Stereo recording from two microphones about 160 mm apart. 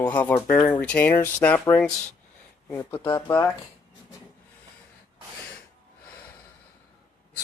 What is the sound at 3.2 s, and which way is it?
Speech, 15° left (ahead or behind).